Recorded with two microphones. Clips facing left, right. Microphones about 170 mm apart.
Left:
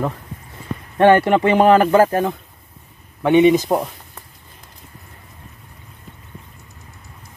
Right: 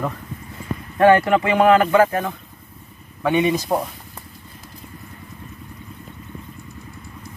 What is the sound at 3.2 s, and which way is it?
Speech, 20° left (ahead or behind).